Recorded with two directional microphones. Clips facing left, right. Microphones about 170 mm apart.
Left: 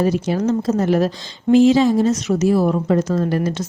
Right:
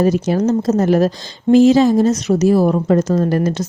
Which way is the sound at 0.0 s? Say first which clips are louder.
Right 3 dB; 45° right (ahead or behind).